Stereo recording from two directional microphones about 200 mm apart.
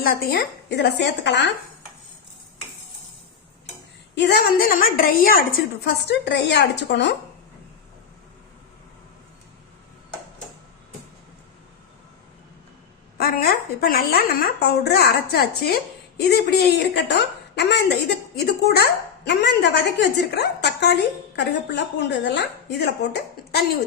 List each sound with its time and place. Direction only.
0.0 s a woman's voice: 50° left (ahead or behind)
4.1 s a woman's voice: 60° left (ahead or behind)
6.1 s a woman's voice: 60° left (ahead or behind)
13.1 s a woman's voice: 50° left (ahead or behind)